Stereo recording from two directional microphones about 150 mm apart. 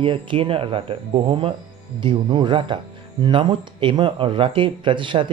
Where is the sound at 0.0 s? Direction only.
35° right (ahead or behind).